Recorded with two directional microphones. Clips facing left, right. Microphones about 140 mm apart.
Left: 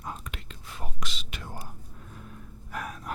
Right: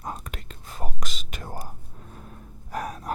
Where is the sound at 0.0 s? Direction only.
40° right (ahead or behind).